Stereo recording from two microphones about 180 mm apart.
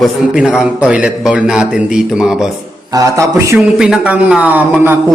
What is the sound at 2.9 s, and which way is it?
Speech, 20° right (ahead or behind).